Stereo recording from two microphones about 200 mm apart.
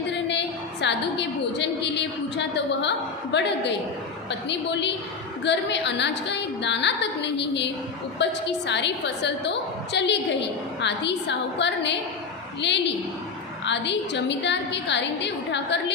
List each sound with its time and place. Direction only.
0.3 s a woman's voice: 60° left (ahead or behind)